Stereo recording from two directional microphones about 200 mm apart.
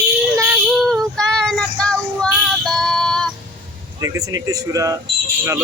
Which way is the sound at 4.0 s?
15° right (ahead or behind).